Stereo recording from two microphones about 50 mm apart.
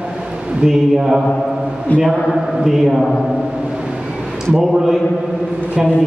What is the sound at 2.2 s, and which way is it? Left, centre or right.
Speech, centre.